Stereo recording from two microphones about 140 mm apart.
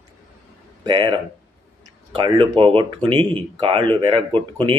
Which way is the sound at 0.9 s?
35° right (ahead or behind).